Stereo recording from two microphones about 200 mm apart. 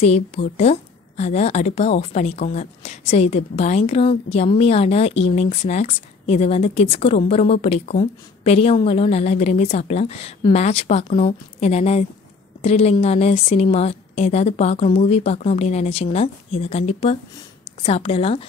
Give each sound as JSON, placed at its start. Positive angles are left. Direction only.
{"t": 0.0, "sound": "a woman's voice", "side_deg": 30}